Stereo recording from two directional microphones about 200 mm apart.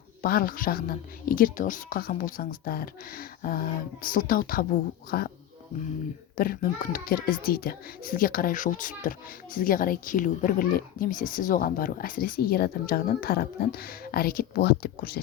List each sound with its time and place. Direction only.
0.2 s speech: 45° left (ahead or behind)
6.3 s speech: 45° left (ahead or behind)